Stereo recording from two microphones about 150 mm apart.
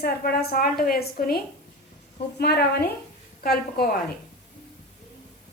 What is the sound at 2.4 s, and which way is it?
A woman's voice, 90° left.